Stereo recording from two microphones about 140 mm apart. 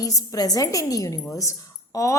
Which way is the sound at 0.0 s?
25° left (ahead or behind).